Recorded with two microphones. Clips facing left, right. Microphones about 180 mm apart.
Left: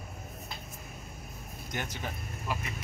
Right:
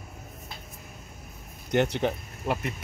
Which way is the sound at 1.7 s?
70° right (ahead or behind).